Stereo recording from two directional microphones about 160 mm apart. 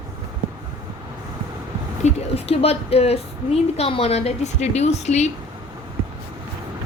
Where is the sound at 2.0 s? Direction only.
40° left (ahead or behind).